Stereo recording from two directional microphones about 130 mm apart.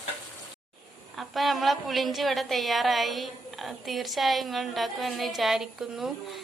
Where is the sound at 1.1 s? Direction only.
Centre (ahead or behind).